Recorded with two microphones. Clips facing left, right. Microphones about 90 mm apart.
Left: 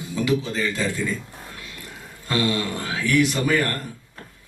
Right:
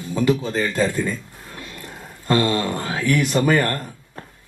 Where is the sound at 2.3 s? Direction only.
50° right (ahead or behind).